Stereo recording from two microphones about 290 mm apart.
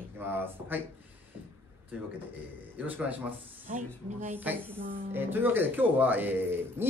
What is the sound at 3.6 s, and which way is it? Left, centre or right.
Speech, right.